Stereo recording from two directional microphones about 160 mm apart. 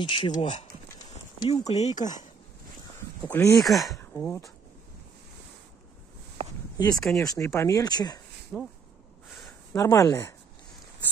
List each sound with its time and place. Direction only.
0.0 s speech: 30° left (ahead or behind)
0.3 s speech: 45° left (ahead or behind)
3.3 s speech: 15° left (ahead or behind)
3.5 s speech: centre (ahead or behind)
4.0 s speech: 10° left (ahead or behind)
7.0 s speech: 5° left (ahead or behind)
7.2 s speech: 15° left (ahead or behind)
8.5 s speech: 5° left (ahead or behind)
9.7 s speech: 20° left (ahead or behind)